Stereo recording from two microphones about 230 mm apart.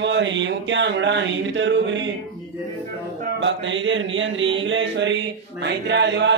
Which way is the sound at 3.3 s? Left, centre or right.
Right.